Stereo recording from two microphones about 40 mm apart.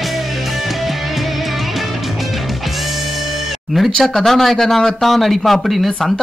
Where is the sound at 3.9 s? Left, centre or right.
Centre.